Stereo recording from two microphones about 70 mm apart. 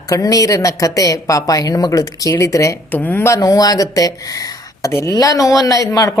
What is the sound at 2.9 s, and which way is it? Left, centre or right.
Speech, left.